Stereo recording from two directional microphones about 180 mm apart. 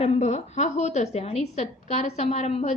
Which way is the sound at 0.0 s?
35° left (ahead or behind).